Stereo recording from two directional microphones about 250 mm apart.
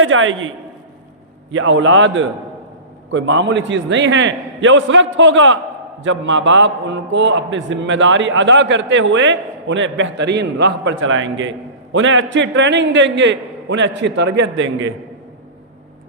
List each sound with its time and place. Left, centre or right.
0.0 s a man's voice: right
1.5 s a man's voice: right